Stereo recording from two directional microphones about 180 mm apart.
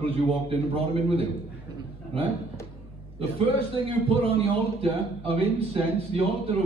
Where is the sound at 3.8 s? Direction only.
30° right (ahead or behind).